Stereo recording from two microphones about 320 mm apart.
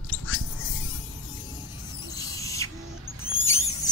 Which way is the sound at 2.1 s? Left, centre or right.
Centre.